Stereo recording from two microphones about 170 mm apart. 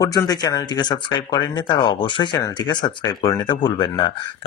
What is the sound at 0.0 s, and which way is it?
Speech, 20° left (ahead or behind).